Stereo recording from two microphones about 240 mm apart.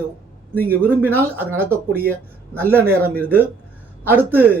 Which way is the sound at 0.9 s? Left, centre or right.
Centre.